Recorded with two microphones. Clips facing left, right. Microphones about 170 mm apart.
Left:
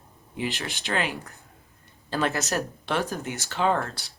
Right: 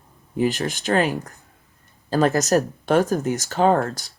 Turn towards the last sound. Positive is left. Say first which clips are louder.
# right 6 dB
turn(degrees=-45)  # may be behind; listen again after turning